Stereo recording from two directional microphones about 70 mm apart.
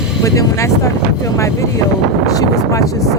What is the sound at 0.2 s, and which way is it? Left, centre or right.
Speech, left.